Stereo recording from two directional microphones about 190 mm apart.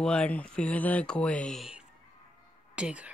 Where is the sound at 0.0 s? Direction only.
5° left (ahead or behind).